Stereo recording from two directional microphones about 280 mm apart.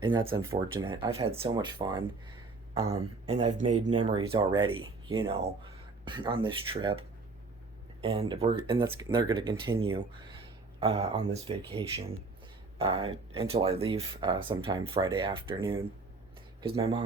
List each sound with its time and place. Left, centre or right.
0.0 s speech: centre
3.6 s speech: right
3.9 s speech: centre
8.0 s speech: centre